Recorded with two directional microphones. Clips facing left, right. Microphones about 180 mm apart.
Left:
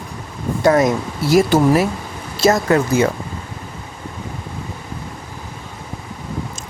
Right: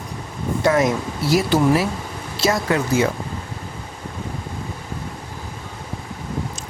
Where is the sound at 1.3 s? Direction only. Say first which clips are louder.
Left 4 dB; 50° left (ahead or behind).